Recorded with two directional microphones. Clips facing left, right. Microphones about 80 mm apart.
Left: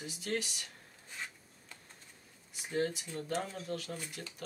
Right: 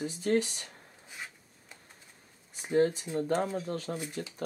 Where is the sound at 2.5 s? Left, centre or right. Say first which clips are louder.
Right 8 dB; right.